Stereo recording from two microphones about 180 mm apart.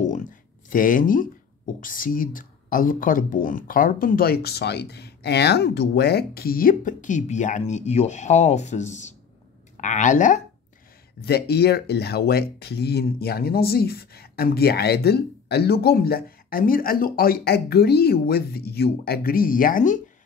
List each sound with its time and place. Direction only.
0.0 s a sound: 45° left (ahead or behind)
1.8 s speech: 50° left (ahead or behind)
11.1 s speech: 60° left (ahead or behind)